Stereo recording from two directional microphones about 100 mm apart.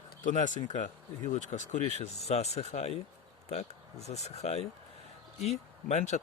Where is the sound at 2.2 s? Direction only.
90° left.